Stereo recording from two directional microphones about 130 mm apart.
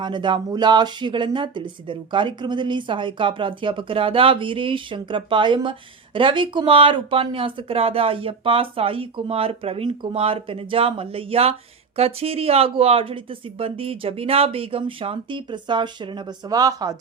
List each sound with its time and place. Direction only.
0.0 s speech: 35° right (ahead or behind)